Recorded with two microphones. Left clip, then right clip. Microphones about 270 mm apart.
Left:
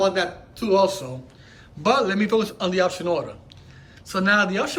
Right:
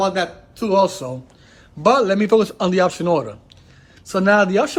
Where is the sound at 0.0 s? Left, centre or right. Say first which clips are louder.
Right 2 dB; centre.